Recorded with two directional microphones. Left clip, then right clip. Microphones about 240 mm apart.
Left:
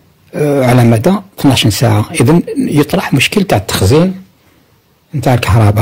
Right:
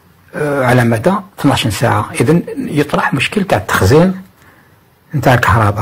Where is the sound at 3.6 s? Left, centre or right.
Left.